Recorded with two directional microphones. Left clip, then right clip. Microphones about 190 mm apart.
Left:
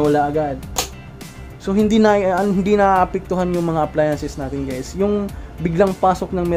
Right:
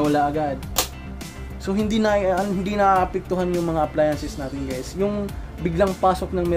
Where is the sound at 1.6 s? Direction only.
45° left (ahead or behind).